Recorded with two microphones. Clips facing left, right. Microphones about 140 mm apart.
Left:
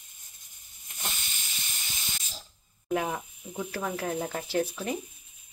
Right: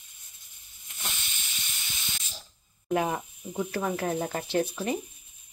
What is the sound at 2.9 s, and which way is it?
Speech, 5° right (ahead or behind).